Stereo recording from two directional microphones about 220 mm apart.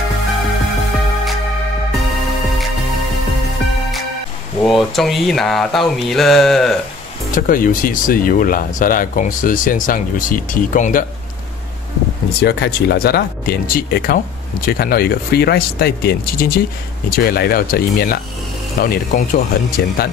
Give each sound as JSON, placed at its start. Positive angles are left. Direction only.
{"t": 4.6, "sound": "a sound", "side_deg": 0}
{"t": 7.3, "sound": "speech", "side_deg": 40}
{"t": 12.4, "sound": "speech", "side_deg": 50}